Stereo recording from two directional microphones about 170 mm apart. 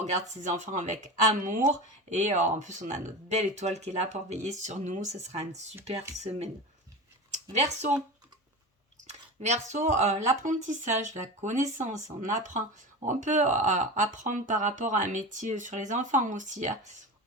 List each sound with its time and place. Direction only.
0.0 s speech: 45° right (ahead or behind)
7.5 s speech: 45° right (ahead or behind)
9.0 s speech: 40° right (ahead or behind)